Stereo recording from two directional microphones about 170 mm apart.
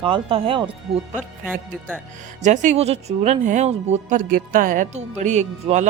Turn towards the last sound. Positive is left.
turn(degrees=-45)  # may be behind; listen again after turning